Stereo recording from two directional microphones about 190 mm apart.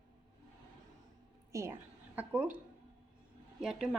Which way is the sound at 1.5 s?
15° right (ahead or behind).